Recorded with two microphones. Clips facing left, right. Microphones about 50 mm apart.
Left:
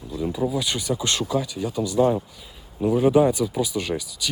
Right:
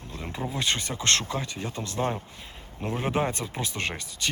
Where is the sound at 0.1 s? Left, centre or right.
Right.